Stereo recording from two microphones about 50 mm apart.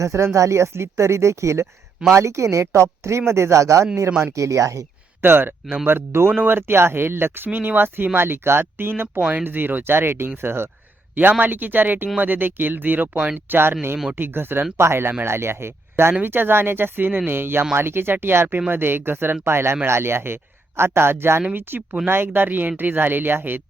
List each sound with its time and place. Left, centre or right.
0.0 s speech: right
5.2 s speech: right
11.1 s speech: right
13.1 s speech: right
13.5 s speech: right
16.2 s speech: right
21.5 s speech: right